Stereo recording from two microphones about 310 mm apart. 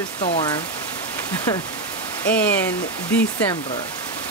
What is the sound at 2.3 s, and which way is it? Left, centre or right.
Speech, centre.